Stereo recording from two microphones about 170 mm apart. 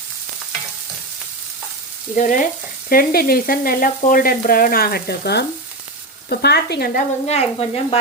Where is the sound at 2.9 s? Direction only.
60° left (ahead or behind).